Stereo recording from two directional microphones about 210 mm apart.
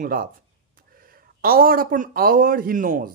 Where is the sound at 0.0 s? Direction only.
40° right (ahead or behind).